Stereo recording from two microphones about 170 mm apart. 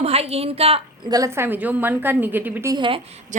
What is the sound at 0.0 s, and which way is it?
A woman's voice, 35° right (ahead or behind).